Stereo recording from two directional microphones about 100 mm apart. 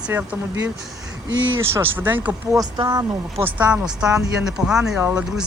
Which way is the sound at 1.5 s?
25° right (ahead or behind).